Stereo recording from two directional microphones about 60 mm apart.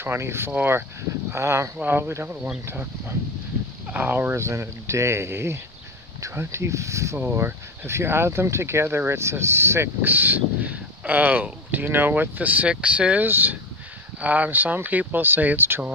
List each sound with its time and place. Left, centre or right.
0.0 s speech: right
1.3 s speech: right
1.8 s speech: right
4.3 s speech: right
7.3 s speech: right
10.0 s speech: right
13.2 s speech: right